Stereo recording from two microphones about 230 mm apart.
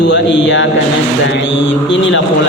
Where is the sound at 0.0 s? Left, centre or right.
Left.